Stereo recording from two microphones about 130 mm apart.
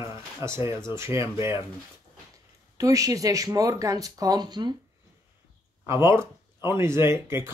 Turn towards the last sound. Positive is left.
turn(degrees=-20)  # may be behind; listen again after turning